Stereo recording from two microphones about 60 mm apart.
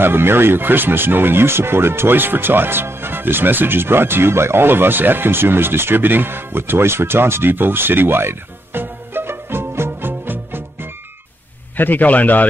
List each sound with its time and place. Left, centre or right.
0.0 s speech: right
11.7 s a man's voice: left